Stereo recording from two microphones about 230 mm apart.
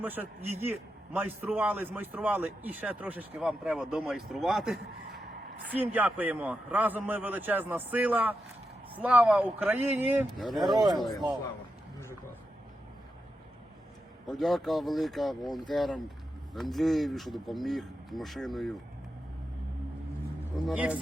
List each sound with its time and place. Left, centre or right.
0.0 s a man's voice: centre
10.6 s a man's voice: centre
14.3 s a man's voice: centre
20.7 s a man's voice: centre